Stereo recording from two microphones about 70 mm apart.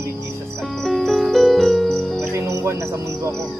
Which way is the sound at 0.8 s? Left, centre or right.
Centre.